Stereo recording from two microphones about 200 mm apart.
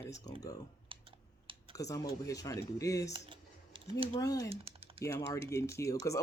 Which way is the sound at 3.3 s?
25° right (ahead or behind).